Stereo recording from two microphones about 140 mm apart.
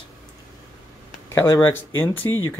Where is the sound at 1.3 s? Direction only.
15° left (ahead or behind).